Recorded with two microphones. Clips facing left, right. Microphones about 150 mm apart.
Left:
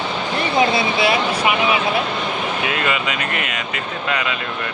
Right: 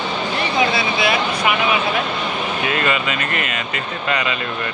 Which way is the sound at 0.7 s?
25° left (ahead or behind).